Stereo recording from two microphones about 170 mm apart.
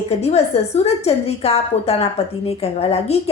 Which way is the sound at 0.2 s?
40° left (ahead or behind).